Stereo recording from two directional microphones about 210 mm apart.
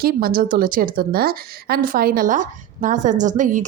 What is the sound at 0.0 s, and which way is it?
A woman's voice, 45° right (ahead or behind).